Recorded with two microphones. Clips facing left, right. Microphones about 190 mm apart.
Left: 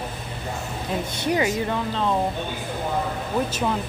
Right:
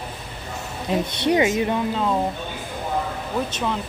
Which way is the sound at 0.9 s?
20° right (ahead or behind).